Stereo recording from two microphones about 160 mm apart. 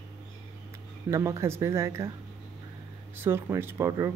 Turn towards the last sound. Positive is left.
turn(degrees=-20)  # may be behind; listen again after turning